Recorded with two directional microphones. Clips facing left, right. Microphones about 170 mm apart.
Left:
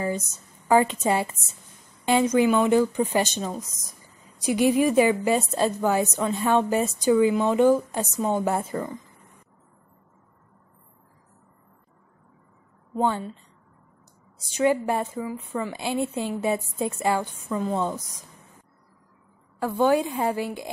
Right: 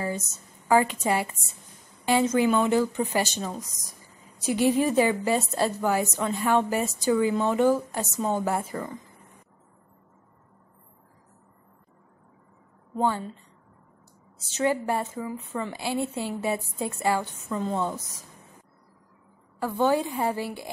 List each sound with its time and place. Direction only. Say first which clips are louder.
0.7 s a woman's voice: left 2 dB; 20° left (ahead or behind)
12.9 s a woman's voice: left 1 dB; 20° left (ahead or behind)
14.4 s a woman's voice: left 3 dB; 15° left (ahead or behind)
19.6 s a woman's voice: left 2 dB; 15° left (ahead or behind)